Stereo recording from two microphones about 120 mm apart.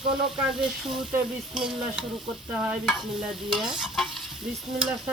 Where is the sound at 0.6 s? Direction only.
5° right (ahead or behind).